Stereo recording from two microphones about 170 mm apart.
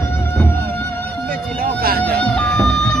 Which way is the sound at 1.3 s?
60° right (ahead or behind).